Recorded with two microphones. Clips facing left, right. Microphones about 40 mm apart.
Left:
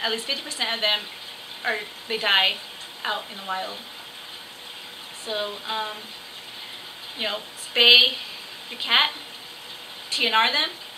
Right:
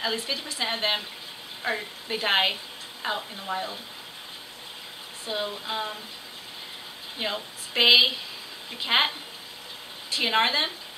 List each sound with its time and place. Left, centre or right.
0.0 s a woman's voice: centre
5.2 s a woman's voice: centre
7.2 s a woman's voice: centre
10.1 s a woman's voice: centre